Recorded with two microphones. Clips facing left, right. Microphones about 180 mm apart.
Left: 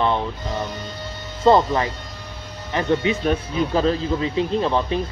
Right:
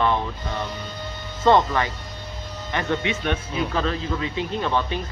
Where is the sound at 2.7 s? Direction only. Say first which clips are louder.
Left 5 dB; 30° left (ahead or behind).